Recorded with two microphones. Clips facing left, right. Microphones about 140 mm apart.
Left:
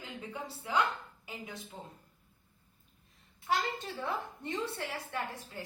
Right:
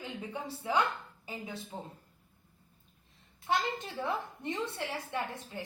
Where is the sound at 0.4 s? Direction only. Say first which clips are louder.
Right 4 dB; 25° right (ahead or behind).